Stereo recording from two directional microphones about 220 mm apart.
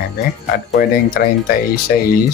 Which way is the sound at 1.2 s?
40° left (ahead or behind).